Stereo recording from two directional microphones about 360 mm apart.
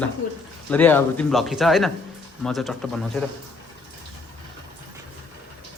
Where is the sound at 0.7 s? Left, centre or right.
Centre.